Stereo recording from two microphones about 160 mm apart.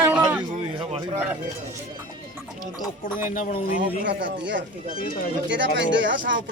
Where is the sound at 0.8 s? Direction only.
40° right (ahead or behind).